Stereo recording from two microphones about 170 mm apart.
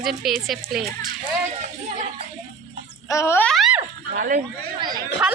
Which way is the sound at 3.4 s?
Centre (ahead or behind).